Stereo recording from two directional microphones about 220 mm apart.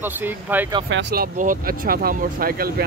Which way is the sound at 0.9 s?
45° right (ahead or behind).